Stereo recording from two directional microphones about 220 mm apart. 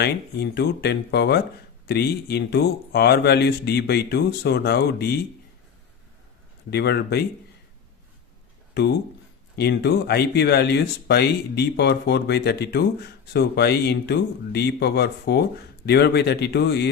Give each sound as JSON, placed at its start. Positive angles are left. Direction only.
{"t": 0.0, "sound": "speech", "side_deg": 50}
{"t": 6.7, "sound": "speech", "side_deg": 50}
{"t": 8.8, "sound": "speech", "side_deg": 50}